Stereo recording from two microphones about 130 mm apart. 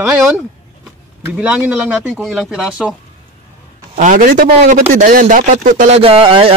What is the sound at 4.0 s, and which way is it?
A man's voice, 85° right.